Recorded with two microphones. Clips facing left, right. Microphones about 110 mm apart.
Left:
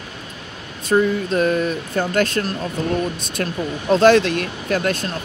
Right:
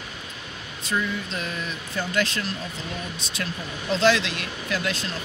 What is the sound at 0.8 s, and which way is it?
Speech, 45° left (ahead or behind).